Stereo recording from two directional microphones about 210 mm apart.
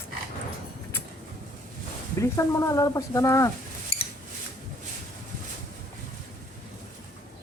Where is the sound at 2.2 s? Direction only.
15° left (ahead or behind).